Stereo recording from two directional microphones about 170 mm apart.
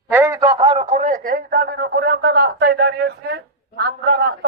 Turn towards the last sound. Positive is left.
turn(degrees=-75)  # may be behind; listen again after turning